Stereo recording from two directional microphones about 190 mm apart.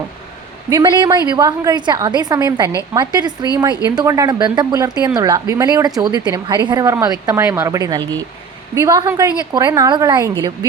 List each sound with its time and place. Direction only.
0.7 s a woman's voice: 25° right (ahead or behind)